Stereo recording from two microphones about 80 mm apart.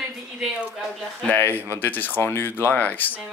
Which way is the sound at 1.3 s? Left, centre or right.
Left.